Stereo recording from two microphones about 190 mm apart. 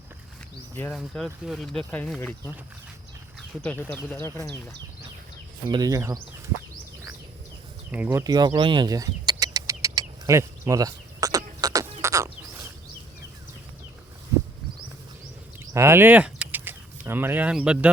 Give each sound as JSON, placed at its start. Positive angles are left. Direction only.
{"t": 0.8, "sound": "speech", "side_deg": 5}
{"t": 3.6, "sound": "speech", "side_deg": 10}
{"t": 5.6, "sound": "speech", "side_deg": -20}
{"t": 7.9, "sound": "speech", "side_deg": -10}
{"t": 8.2, "sound": "bird", "side_deg": -20}
{"t": 15.7, "sound": "speech", "side_deg": -15}